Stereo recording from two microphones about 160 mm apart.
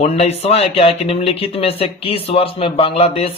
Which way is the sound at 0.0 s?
40° left (ahead or behind).